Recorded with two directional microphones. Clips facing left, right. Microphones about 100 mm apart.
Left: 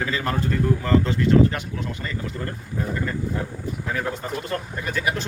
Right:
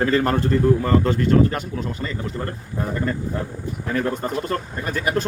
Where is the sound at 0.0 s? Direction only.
50° right (ahead or behind).